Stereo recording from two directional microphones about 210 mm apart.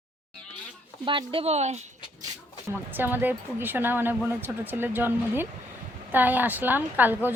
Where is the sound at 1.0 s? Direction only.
25° right (ahead or behind).